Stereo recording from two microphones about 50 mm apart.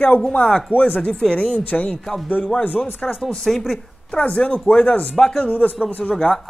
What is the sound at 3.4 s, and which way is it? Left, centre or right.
Speech, centre.